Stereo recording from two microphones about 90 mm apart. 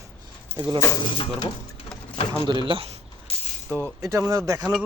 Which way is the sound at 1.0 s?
75° left (ahead or behind).